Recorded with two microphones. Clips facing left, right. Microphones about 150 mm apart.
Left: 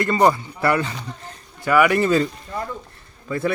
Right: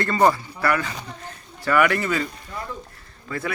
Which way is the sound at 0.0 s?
20° left (ahead or behind).